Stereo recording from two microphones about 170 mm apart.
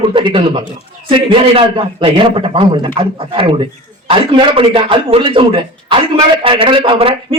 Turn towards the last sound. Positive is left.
turn(degrees=-35)  # may be behind; listen again after turning